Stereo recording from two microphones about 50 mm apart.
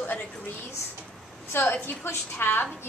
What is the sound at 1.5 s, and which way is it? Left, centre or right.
A woman's voice, left.